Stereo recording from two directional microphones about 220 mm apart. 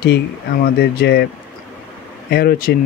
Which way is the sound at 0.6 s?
45° left (ahead or behind).